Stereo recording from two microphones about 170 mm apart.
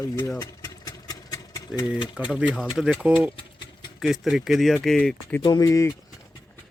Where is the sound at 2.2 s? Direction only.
5° right (ahead or behind).